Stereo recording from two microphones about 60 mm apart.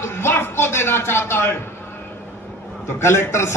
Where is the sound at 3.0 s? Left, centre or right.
Left.